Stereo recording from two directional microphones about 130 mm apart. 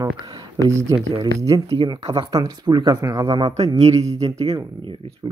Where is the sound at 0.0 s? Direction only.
30° right (ahead or behind).